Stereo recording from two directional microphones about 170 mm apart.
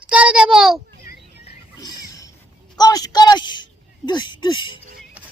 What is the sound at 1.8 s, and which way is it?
Music, 20° left (ahead or behind).